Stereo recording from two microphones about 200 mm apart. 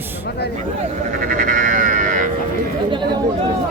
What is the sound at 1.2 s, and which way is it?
Sheep, 40° right (ahead or behind).